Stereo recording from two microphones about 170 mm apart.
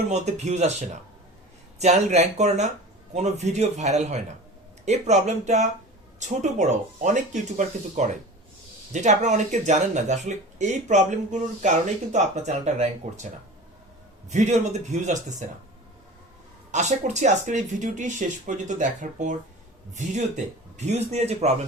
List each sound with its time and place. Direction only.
0.1 s speech: 40° right (ahead or behind)
14.3 s speech: 45° right (ahead or behind)
16.7 s speech: 45° right (ahead or behind)